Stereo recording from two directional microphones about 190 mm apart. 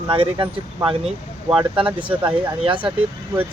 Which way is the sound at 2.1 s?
10° right (ahead or behind).